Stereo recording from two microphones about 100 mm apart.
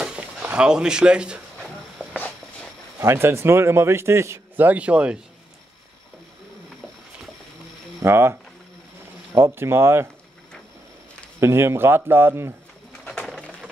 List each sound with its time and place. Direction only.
0.0 s a sound: 10° right (ahead or behind)
3.0 s a man's voice: 25° right (ahead or behind)
8.0 s a man's voice: 25° right (ahead or behind)
9.4 s a man's voice: 25° right (ahead or behind)
11.3 s a man's voice: 25° right (ahead or behind)
13.1 s pigeon: 10° left (ahead or behind)